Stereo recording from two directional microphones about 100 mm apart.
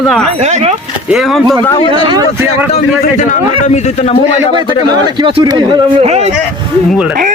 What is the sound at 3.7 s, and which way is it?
Speech, 90° left.